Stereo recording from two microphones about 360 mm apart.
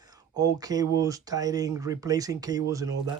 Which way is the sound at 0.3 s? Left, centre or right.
Centre.